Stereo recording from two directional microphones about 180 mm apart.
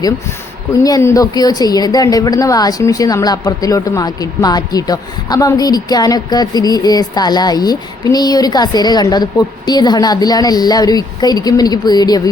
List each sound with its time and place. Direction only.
0.9 s a woman's voice: 20° left (ahead or behind)